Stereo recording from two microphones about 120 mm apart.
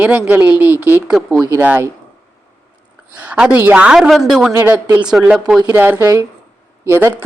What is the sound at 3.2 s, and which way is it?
A man's voice, 10° right (ahead or behind).